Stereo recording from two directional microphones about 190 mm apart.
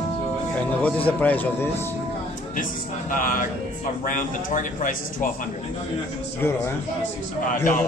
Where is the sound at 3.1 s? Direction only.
45° left (ahead or behind).